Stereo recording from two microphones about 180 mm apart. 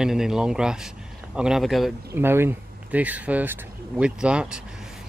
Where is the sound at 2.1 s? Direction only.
15° right (ahead or behind).